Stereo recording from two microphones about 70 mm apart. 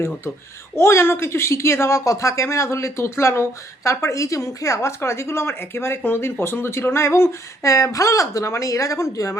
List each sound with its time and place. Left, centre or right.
0.8 s speech: left